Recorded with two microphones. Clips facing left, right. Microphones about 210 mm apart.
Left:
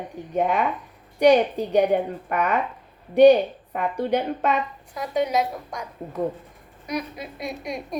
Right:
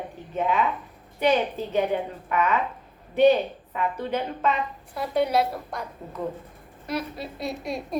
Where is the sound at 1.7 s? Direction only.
50° left (ahead or behind).